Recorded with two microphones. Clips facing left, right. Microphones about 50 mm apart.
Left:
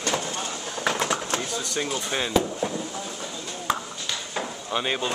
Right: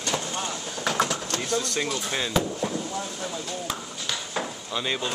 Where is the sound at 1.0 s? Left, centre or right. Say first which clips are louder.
Even; centre.